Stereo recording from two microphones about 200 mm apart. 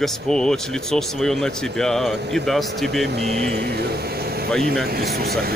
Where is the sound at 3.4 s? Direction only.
55° right (ahead or behind).